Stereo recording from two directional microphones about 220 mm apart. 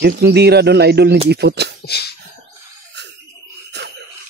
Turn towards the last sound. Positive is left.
turn(degrees=-50)  # may be behind; listen again after turning